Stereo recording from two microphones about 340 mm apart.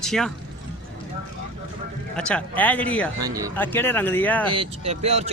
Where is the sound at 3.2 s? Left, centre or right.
Centre.